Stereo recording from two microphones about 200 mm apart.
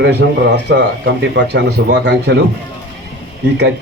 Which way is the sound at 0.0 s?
60° right (ahead or behind).